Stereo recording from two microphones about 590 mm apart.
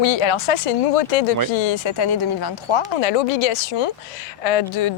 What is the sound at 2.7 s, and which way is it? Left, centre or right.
Speech, left.